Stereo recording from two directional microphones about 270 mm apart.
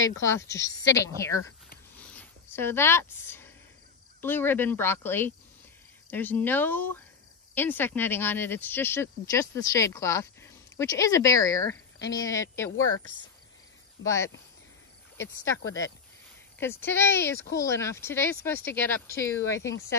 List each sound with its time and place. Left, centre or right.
0.2 s speech: centre
2.0 s a sound: centre
4.2 s speech: centre
12.7 s speech: left
14.0 s speech: centre
15.6 s speech: centre